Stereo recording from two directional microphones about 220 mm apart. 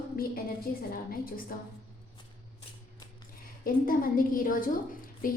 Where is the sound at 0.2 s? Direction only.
40° left (ahead or behind).